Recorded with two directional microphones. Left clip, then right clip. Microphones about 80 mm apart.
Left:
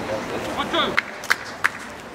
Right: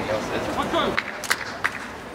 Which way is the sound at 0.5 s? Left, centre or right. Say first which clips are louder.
Left 2 dB; left.